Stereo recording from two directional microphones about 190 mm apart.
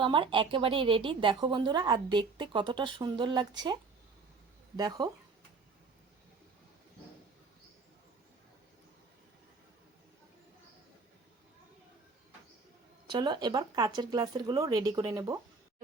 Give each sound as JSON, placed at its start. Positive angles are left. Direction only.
{"t": 0.0, "sound": "a woman's voice", "side_deg": -25}
{"t": 4.8, "sound": "a woman's voice", "side_deg": -20}
{"t": 13.1, "sound": "a woman's voice", "side_deg": -25}